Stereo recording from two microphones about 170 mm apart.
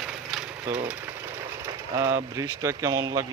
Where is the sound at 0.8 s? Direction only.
10° right (ahead or behind).